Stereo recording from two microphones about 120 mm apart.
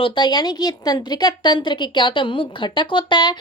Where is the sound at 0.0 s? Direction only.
40° left (ahead or behind).